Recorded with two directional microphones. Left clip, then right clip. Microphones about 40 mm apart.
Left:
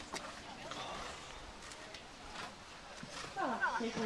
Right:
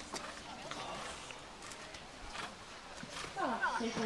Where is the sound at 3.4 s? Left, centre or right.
Centre.